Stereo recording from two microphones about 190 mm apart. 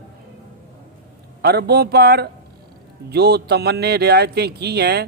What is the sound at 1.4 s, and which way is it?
Speech, 55° right (ahead or behind).